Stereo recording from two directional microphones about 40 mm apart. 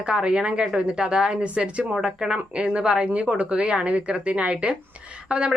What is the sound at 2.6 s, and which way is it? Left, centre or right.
Speech, right.